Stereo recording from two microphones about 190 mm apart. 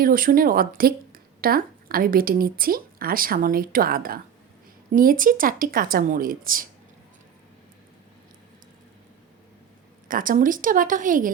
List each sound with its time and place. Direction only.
0.0 s speech: 50° right (ahead or behind)
10.1 s speech: 45° right (ahead or behind)